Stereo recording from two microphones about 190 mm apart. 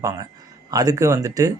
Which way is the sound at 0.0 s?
15° right (ahead or behind).